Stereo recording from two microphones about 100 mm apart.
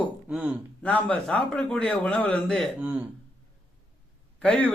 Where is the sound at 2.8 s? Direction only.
15° right (ahead or behind).